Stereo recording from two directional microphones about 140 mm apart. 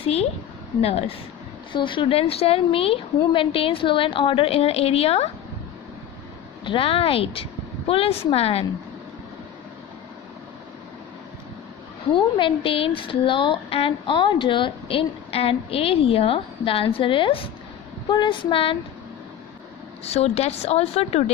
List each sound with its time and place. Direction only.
0.0 s a woman's voice: 45° left (ahead or behind)
1.7 s a woman's voice: 35° left (ahead or behind)
6.6 s speech: 40° left (ahead or behind)
12.1 s a woman's voice: 35° left (ahead or behind)
20.1 s speech: 50° left (ahead or behind)